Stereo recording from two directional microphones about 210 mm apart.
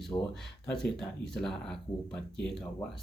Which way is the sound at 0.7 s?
Centre (ahead or behind).